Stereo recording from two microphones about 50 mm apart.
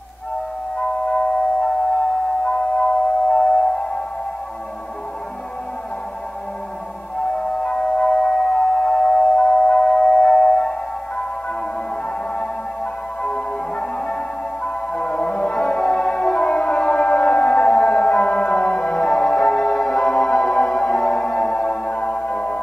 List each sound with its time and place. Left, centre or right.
0.7 s music: left
7.2 s music: centre
13.2 s music: centre